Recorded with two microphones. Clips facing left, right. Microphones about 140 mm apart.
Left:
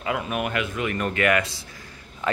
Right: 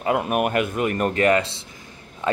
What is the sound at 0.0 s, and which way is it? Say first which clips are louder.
A man's voice: right 6 dB; 50° right (ahead or behind).